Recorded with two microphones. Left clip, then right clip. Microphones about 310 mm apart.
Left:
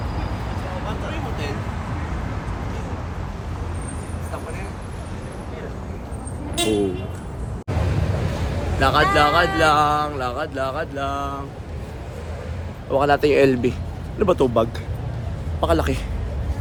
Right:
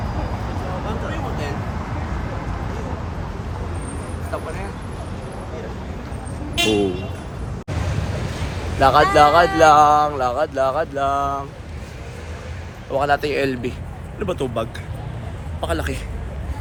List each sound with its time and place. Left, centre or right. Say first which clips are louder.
8.8 s speech: right 4 dB; centre
9.1 s a sound: right 4 dB; centre
12.9 s speech: left 2 dB; centre